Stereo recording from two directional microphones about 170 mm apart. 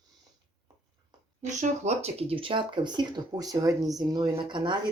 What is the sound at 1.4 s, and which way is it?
Speech, 40° right (ahead or behind).